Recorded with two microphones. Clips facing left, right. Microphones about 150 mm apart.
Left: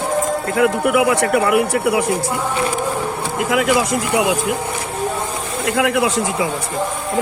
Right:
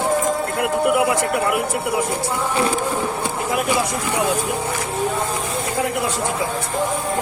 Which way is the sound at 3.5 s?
90° left.